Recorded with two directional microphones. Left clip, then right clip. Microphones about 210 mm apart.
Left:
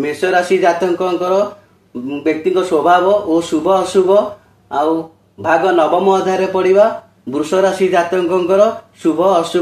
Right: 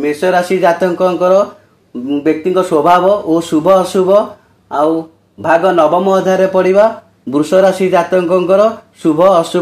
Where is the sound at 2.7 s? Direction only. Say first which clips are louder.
Right 2 dB; 45° right (ahead or behind).